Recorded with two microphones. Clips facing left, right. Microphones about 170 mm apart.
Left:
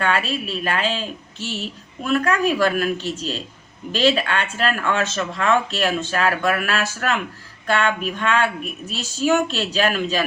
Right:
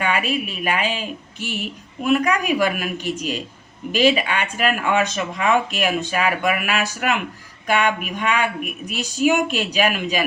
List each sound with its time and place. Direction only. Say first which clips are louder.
0.0 s speech: even; 15° right (ahead or behind)